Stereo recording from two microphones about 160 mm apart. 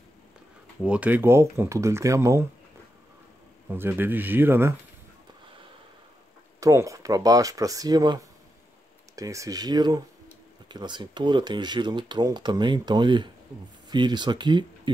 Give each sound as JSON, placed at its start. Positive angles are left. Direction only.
{"t": 0.8, "sound": "speech", "side_deg": -10}
{"t": 3.6, "sound": "speech", "side_deg": -15}
{"t": 6.6, "sound": "speech", "side_deg": -20}